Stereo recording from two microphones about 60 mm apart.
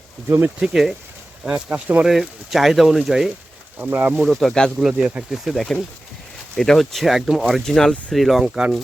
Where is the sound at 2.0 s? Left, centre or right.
Centre.